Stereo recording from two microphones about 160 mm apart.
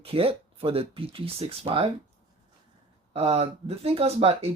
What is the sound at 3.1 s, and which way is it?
Speech, 40° right (ahead or behind).